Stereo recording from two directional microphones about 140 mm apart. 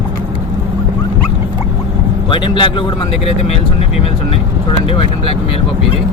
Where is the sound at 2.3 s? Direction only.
35° left (ahead or behind).